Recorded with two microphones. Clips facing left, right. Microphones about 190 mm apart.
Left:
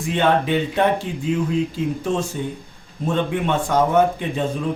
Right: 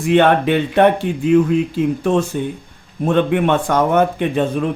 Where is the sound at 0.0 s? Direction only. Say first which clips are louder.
Right 6 dB; 65° right (ahead or behind).